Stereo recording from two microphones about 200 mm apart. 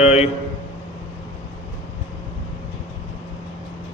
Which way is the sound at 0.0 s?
30° left (ahead or behind).